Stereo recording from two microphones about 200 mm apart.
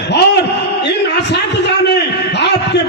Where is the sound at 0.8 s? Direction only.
60° left (ahead or behind).